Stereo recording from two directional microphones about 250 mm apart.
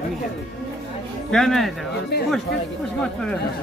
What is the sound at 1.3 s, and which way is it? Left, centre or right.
Speech, centre.